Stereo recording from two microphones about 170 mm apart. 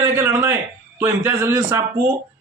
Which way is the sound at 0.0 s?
15° right (ahead or behind).